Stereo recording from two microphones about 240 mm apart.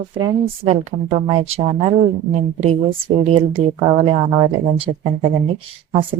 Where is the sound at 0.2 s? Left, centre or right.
Right.